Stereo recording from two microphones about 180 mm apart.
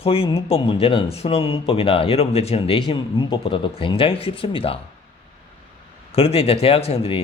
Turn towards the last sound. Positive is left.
turn(degrees=35)  # may be behind; listen again after turning